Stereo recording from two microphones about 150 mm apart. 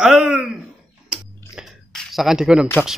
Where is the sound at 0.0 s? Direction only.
5° right (ahead or behind).